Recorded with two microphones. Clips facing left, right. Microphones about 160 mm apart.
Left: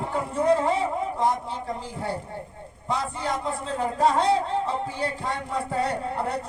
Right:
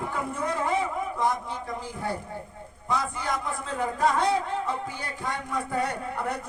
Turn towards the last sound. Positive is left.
turn(degrees=30)  # may be behind; listen again after turning